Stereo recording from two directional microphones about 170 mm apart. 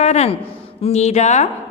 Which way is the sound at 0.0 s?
40° left (ahead or behind).